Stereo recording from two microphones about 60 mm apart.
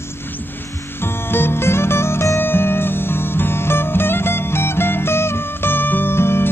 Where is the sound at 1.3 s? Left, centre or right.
Left.